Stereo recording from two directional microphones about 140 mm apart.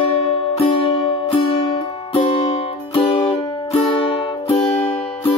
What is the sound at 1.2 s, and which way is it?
Music, 45° left (ahead or behind).